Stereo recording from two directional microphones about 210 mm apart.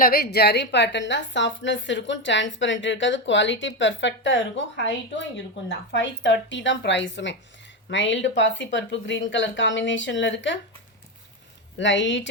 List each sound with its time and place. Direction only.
0.0 s a woman's voice: 45° left (ahead or behind)
11.8 s a woman's voice: 60° left (ahead or behind)